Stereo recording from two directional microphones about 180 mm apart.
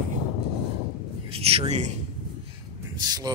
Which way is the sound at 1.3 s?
35° right (ahead or behind).